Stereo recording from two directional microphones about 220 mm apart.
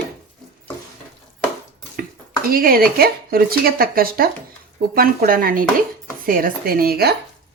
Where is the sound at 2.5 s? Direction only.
40° right (ahead or behind).